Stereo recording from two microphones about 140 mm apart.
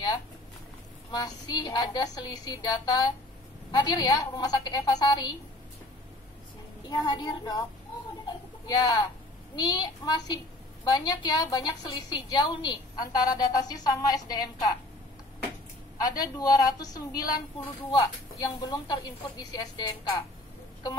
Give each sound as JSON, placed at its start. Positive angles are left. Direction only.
{"t": 1.1, "sound": "a woman's voice", "side_deg": 30}
{"t": 6.9, "sound": "a woman's voice", "side_deg": 30}
{"t": 8.3, "sound": "a sound", "side_deg": 30}
{"t": 9.6, "sound": "a woman's voice", "side_deg": 30}
{"t": 16.0, "sound": "a woman's voice", "side_deg": 25}